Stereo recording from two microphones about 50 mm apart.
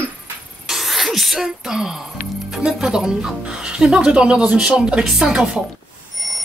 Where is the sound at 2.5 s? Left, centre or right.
Centre.